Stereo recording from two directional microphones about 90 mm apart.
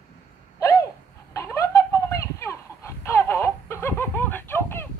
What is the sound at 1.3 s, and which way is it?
Chicken, 35° left (ahead or behind).